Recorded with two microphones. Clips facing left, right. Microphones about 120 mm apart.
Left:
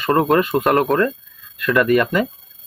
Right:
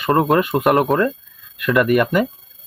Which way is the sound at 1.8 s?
10° right (ahead or behind).